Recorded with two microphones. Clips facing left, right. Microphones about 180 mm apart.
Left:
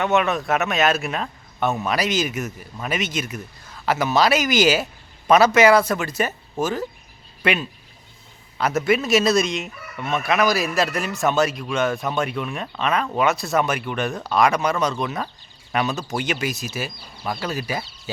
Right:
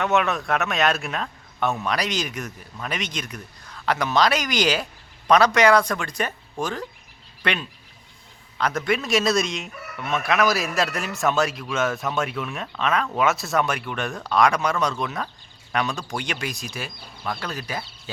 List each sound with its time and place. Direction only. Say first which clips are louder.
0.0 s chicken: left 2 dB; centre (ahead or behind)
7.4 s speech: left 4 dB; 5° left (ahead or behind)
8.5 s chicken: left 4 dB; 5° left (ahead or behind)